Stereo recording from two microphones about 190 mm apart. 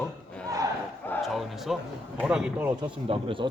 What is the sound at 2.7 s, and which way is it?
Speech, 25° right (ahead or behind).